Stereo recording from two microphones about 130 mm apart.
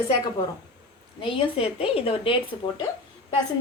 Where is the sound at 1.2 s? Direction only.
45° left (ahead or behind).